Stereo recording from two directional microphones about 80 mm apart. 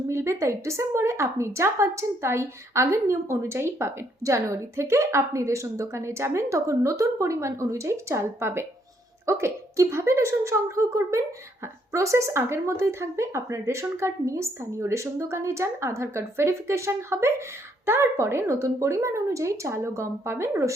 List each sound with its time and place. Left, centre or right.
0.1 s speech: right